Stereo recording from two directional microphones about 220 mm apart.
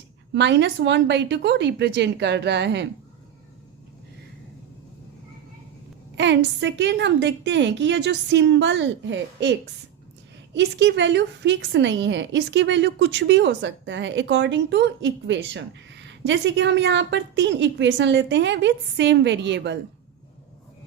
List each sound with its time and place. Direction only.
0.3 s a woman's voice: 50° right (ahead or behind)
6.1 s a woman's voice: 55° right (ahead or behind)